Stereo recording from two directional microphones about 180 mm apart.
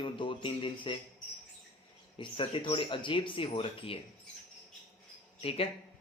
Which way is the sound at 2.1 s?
30° left (ahead or behind).